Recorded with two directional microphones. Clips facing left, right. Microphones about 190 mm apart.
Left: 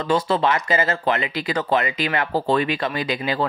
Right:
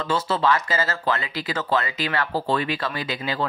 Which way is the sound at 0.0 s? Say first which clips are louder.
Left 3 dB; 20° left (ahead or behind).